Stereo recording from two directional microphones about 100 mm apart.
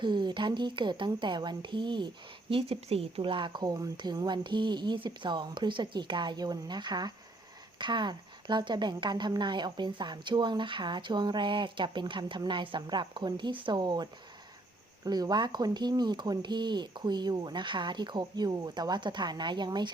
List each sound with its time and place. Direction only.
0.0 s speech: 50° right (ahead or behind)
2.5 s speech: 75° right (ahead or behind); by 19.9 s 50° right (ahead or behind)